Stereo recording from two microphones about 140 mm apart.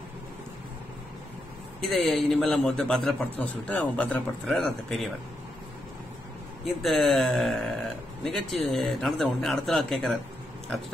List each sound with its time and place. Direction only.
1.8 s a man's voice: centre (ahead or behind)
6.6 s a man's voice: centre (ahead or behind)